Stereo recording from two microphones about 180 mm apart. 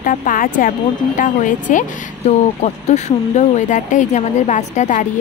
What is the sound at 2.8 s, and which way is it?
A woman's voice, 40° left (ahead or behind).